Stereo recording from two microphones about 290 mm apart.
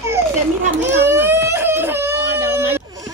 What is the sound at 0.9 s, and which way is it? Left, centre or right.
Baby cry, centre.